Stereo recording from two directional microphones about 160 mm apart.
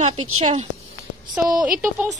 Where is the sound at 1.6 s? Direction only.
5° right (ahead or behind).